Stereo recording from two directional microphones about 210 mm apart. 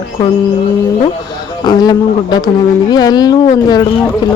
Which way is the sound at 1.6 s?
20° left (ahead or behind).